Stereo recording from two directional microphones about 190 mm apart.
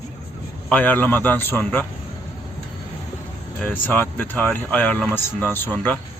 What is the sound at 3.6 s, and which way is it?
A man's voice, 10° left (ahead or behind).